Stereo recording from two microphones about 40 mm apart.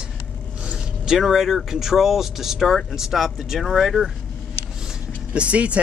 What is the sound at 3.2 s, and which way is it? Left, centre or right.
Speech, centre.